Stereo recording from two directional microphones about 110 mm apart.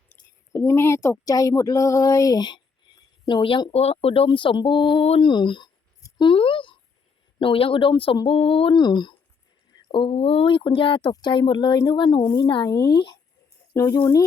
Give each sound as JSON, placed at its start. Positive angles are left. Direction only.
{"t": 0.5, "sound": "speech", "side_deg": 30}
{"t": 3.7, "sound": "speech", "side_deg": 70}
{"t": 5.0, "sound": "speech", "side_deg": 65}
{"t": 5.3, "sound": "speech", "side_deg": 45}
{"t": 6.1, "sound": "a sound", "side_deg": 50}
{"t": 7.3, "sound": "speech", "side_deg": 55}
{"t": 8.4, "sound": "speech", "side_deg": 60}
{"t": 8.8, "sound": "speech", "side_deg": 45}
{"t": 13.7, "sound": "speech", "side_deg": 30}